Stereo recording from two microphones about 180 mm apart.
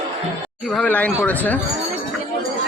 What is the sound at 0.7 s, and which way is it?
Speech, 5° left (ahead or behind).